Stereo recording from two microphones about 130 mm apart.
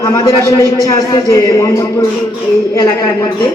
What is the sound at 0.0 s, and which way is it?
A man's voice, 25° left (ahead or behind).